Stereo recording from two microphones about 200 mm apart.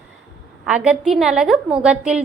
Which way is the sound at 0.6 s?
5° right (ahead or behind).